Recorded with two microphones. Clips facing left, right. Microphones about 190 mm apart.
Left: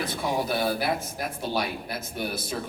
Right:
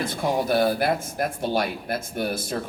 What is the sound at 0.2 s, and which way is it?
A man's voice, 50° right (ahead or behind).